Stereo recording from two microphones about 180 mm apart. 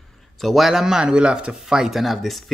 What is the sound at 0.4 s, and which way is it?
Speech, centre (ahead or behind).